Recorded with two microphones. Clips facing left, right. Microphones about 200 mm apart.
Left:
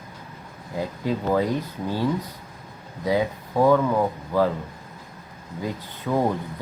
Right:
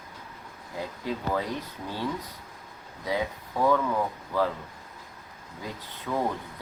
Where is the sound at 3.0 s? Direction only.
35° left (ahead or behind).